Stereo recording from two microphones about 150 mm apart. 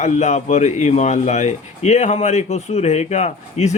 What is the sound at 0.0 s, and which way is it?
Speech, 50° left (ahead or behind).